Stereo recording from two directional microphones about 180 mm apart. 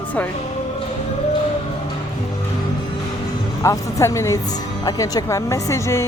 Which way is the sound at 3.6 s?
15° left (ahead or behind).